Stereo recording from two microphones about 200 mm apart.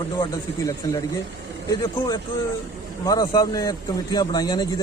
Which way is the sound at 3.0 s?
20° left (ahead or behind).